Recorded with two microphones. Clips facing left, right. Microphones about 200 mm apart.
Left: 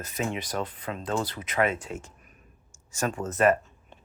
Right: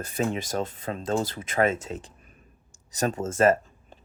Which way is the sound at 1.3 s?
30° right (ahead or behind).